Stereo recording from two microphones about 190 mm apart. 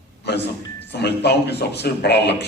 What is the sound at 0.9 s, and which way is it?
A man's voice, 60° left (ahead or behind).